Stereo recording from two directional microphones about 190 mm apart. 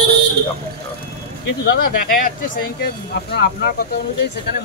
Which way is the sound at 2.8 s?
60° left (ahead or behind).